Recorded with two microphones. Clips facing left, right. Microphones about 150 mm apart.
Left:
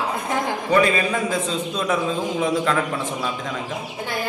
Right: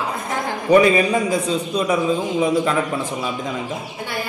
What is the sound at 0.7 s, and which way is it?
A man's voice, 15° right (ahead or behind).